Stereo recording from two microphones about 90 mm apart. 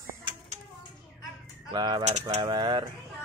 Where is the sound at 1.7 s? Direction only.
60° right (ahead or behind).